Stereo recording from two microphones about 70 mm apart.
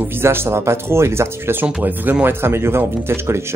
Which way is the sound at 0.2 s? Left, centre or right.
Right.